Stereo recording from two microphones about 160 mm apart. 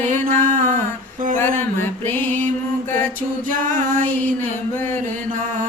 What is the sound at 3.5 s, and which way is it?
Music, 55° right (ahead or behind).